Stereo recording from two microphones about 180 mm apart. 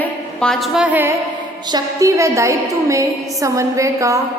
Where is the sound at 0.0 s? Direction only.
5° left (ahead or behind).